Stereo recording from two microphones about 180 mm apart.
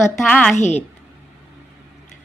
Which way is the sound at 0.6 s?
40° left (ahead or behind).